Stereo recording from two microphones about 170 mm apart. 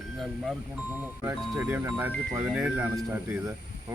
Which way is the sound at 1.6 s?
10° right (ahead or behind).